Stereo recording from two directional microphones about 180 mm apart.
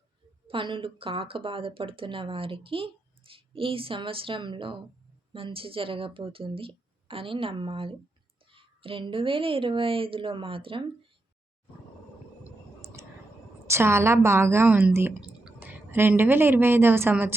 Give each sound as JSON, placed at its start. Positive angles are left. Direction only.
{"t": 0.4, "sound": "speech", "side_deg": -30}
{"t": 13.7, "sound": "a woman's voice", "side_deg": -15}